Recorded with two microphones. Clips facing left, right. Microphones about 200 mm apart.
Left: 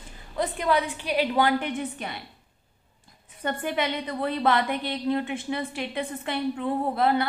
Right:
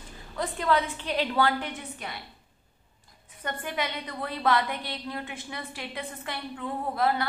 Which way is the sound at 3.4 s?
30° left (ahead or behind).